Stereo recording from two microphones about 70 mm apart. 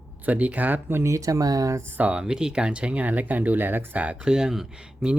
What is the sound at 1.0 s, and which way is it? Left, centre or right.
Speech, right.